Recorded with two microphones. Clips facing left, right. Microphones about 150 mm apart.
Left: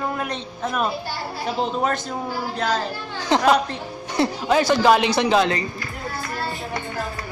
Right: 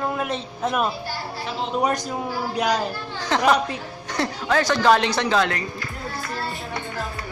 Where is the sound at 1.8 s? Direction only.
15° right (ahead or behind).